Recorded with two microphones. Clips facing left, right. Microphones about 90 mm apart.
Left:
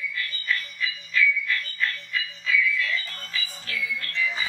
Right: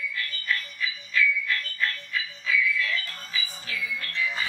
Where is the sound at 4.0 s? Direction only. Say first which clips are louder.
Even; 5° right (ahead or behind).